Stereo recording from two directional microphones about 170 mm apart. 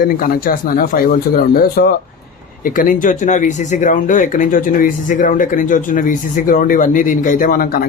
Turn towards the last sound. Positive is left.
turn(degrees=60)  # may be behind; listen again after turning